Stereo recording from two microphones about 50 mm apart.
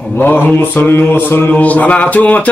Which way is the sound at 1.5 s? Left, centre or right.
Left.